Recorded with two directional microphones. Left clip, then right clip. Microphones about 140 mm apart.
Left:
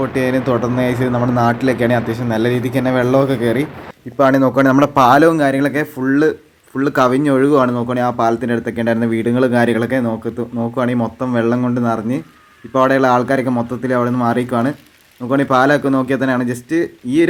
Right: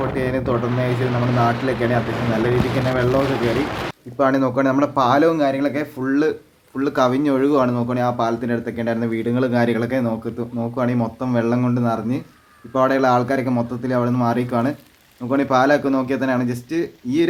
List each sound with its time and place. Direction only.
0.2 s a man's voice: 50° left (ahead or behind)
4.2 s a man's voice: 40° left (ahead or behind)